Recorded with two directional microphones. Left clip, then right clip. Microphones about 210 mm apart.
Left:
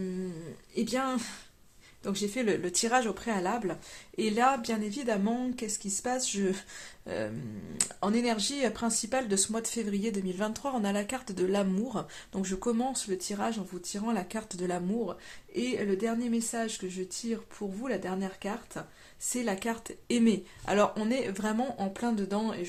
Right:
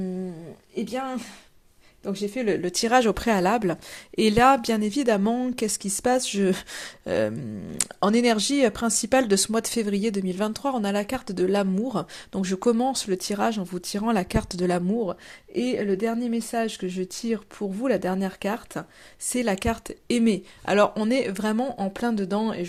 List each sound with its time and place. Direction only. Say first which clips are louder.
0.8 s speech: right 1 dB; 10° right (ahead or behind)
5.5 s speech: right 8 dB; 35° right (ahead or behind)